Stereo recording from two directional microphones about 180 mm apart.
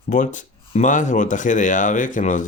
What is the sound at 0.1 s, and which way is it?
Speech, 45° left (ahead or behind).